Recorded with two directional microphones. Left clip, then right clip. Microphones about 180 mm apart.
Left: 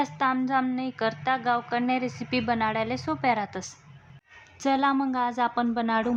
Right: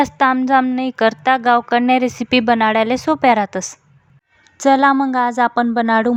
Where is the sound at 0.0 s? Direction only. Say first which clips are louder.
Right 11 dB; 45° right (ahead or behind).